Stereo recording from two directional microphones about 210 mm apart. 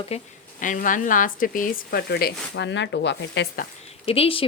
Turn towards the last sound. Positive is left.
turn(degrees=25)  # may be behind; listen again after turning